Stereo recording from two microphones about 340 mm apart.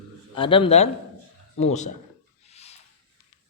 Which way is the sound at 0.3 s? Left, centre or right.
Centre.